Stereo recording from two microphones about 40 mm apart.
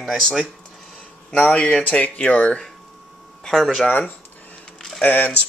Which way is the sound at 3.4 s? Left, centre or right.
Centre.